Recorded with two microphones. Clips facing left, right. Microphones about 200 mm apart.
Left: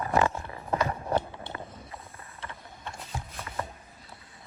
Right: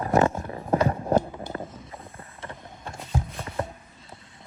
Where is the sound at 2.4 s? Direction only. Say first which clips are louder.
Right 3 dB; 45° right (ahead or behind).